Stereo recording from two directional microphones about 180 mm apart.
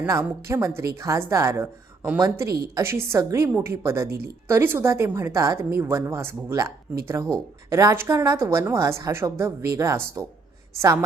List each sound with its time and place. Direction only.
0.0 s a woman's voice: 15° right (ahead or behind)